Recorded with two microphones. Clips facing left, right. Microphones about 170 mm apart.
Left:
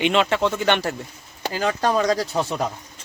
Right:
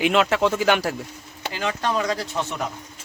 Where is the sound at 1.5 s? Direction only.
40° left (ahead or behind).